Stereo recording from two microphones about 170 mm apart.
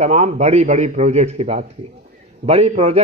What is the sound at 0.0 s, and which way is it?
A man's voice, 40° right (ahead or behind).